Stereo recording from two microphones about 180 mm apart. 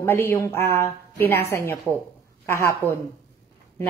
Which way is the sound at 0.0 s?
15° left (ahead or behind).